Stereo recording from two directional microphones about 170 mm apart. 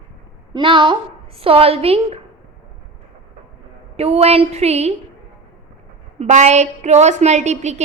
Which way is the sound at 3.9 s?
35° right (ahead or behind).